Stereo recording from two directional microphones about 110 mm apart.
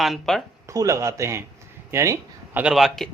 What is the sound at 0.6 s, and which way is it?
Speech, 30° right (ahead or behind).